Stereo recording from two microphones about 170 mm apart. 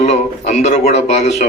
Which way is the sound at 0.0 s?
40° left (ahead or behind).